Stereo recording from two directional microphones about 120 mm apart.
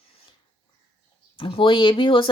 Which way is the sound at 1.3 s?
45° left (ahead or behind).